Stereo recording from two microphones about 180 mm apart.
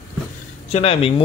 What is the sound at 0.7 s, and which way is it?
Speech, 35° left (ahead or behind).